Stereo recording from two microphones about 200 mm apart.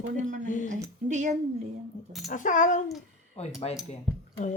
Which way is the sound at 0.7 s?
35° right (ahead or behind).